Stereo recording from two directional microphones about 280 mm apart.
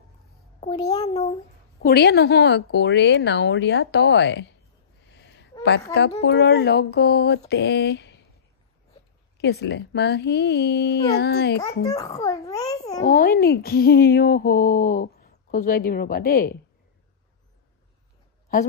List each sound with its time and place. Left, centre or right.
0.6 s a child's voice: centre; by 4.5 s left
5.2 s a sound: left
5.9 s a child's voice: left
9.4 s a child's voice: left
11.8 s a child's voice: centre
13.0 s a child's voice: left